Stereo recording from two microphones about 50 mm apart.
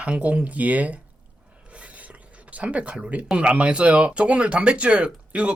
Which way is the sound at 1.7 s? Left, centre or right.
Right.